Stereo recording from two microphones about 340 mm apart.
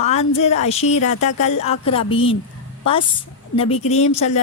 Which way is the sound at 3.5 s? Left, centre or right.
Centre.